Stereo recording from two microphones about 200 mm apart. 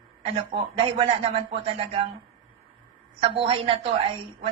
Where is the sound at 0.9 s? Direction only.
30° right (ahead or behind).